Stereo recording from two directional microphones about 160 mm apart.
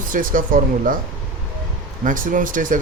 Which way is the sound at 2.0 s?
60° right (ahead or behind).